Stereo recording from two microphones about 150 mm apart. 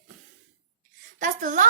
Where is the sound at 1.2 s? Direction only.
60° right (ahead or behind).